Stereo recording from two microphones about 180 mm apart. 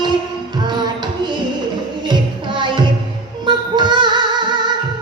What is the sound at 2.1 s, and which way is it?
Music, 25° right (ahead or behind).